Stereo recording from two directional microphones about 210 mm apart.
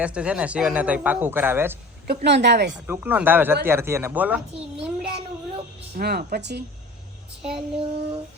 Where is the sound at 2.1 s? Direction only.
50° right (ahead or behind).